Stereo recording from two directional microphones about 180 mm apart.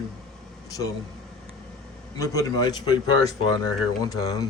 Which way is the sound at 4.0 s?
20° left (ahead or behind).